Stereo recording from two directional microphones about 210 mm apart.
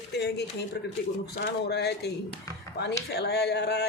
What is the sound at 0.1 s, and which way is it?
Speech, 50° left (ahead or behind).